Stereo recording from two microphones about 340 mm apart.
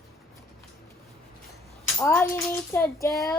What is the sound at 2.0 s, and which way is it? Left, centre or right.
Child singing, centre.